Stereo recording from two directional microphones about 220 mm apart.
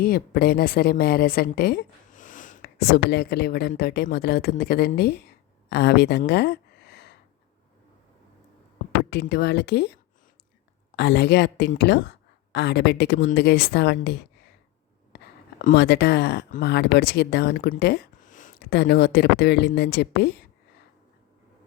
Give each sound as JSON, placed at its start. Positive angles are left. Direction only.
{"t": 0.0, "sound": "a woman's voice", "side_deg": 45}
{"t": 9.0, "sound": "speech", "side_deg": 50}